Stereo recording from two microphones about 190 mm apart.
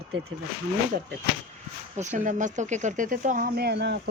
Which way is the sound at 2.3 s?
40° right (ahead or behind).